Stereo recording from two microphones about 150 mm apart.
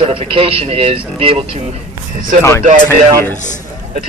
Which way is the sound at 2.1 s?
65° right (ahead or behind).